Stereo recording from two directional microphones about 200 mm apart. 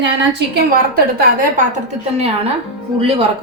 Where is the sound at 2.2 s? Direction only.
30° right (ahead or behind).